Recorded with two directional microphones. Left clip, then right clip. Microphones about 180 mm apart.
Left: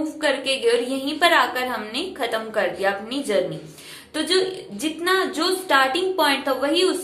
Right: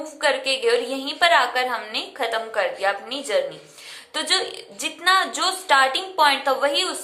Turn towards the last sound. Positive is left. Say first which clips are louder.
# even
turn(degrees=-20)  # may be behind; listen again after turning